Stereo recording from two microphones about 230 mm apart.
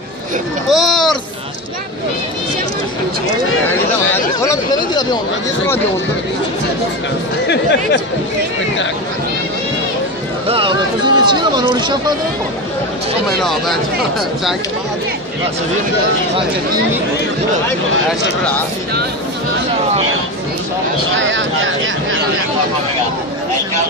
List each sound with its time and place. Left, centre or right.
0.7 s speech: centre
4.1 s speech: centre
7.4 s speech: left
10.5 s speech: right
13.4 s speech: centre
21.0 s a sound: right